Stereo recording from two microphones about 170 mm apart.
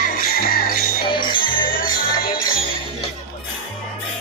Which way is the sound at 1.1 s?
30° left (ahead or behind).